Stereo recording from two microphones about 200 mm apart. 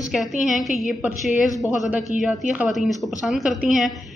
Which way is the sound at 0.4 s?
Centre (ahead or behind).